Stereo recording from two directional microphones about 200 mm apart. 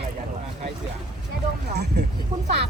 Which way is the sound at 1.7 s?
55° right (ahead or behind).